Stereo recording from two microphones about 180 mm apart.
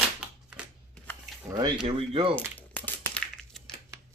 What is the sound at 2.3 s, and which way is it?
Crumpling, 10° left (ahead or behind).